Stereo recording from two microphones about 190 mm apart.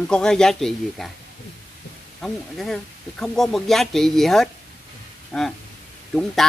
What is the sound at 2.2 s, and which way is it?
Speech, centre (ahead or behind).